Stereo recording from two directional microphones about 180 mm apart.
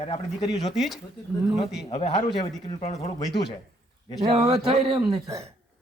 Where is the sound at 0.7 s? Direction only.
Centre (ahead or behind).